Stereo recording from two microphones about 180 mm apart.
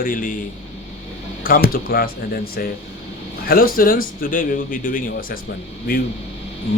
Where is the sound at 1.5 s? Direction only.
55° left (ahead or behind).